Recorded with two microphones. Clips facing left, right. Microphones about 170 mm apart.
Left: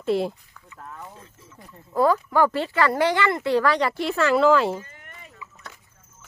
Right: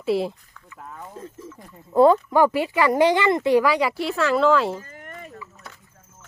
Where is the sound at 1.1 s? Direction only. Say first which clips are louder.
Right 10 dB; 45° right (ahead or behind).